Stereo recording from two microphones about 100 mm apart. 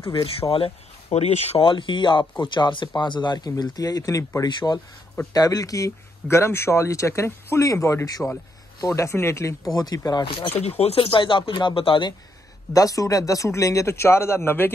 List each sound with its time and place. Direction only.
0.0 s a man's voice: 65° left (ahead or behind); by 4.5 s 30° left (ahead or behind)
4.5 s a man's voice: 50° left (ahead or behind)
10.2 s speech: 55° left (ahead or behind)
10.8 s speech: 85° left
11.1 s speech: 55° left (ahead or behind)
12.7 s a man's voice: 35° left (ahead or behind)